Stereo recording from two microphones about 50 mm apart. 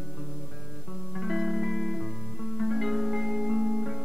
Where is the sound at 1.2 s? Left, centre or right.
Centre.